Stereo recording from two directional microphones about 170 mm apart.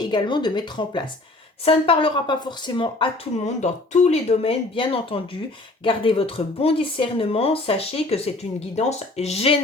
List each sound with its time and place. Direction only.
0.1 s a woman's voice: 25° left (ahead or behind)
3.4 s speech: 40° left (ahead or behind)